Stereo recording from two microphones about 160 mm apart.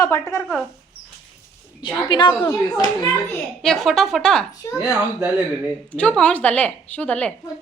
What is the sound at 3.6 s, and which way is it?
Speech, centre (ahead or behind).